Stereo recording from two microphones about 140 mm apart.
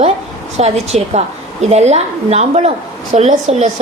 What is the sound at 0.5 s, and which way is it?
A woman's voice, 50° right (ahead or behind).